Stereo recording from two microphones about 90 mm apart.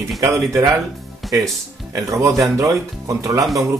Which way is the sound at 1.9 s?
35° right (ahead or behind).